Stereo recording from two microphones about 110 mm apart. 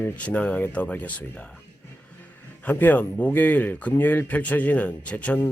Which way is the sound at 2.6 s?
15° left (ahead or behind).